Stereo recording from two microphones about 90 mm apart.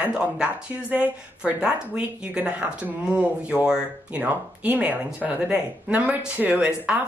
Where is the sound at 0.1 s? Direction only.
10° right (ahead or behind).